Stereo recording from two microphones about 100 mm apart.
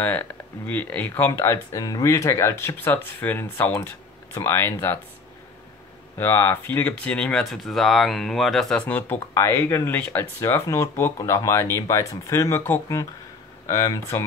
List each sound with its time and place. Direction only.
0.7 s speech: 20° left (ahead or behind)
6.1 s speech: 25° left (ahead or behind)
7.2 s speech: 5° left (ahead or behind)
8.8 s speech: 15° left (ahead or behind)
9.3 s speech: 30° left (ahead or behind)
13.7 s speech: 35° left (ahead or behind)